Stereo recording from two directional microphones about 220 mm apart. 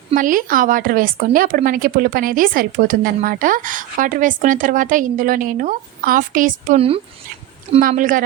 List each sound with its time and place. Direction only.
0.1 s speech: 35° right (ahead or behind)
7.8 s speech: 40° right (ahead or behind)